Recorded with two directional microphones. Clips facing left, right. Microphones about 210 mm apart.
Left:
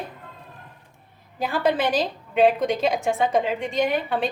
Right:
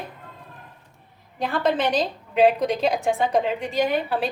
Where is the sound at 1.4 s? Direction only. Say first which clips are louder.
Even; 5° left (ahead or behind).